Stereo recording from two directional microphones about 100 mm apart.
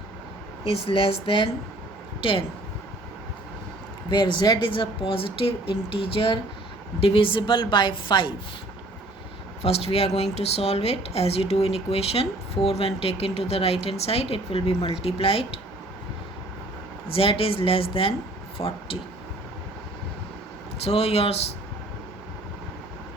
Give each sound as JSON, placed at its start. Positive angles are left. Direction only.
{"t": 0.9, "sound": "speech", "side_deg": 65}
{"t": 4.1, "sound": "a woman's voice", "side_deg": 50}
{"t": 9.6, "sound": "speech", "side_deg": 85}
{"t": 17.1, "sound": "speech", "side_deg": 65}
{"t": 20.8, "sound": "speech", "side_deg": 90}